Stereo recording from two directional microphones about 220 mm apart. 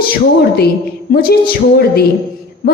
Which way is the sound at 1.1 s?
45° left (ahead or behind).